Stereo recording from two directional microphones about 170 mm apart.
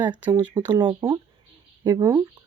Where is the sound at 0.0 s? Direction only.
25° right (ahead or behind).